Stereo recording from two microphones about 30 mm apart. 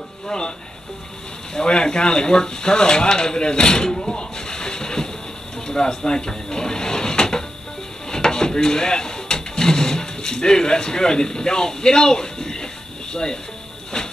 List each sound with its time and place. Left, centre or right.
1.6 s speech: left
13.9 s hiss: left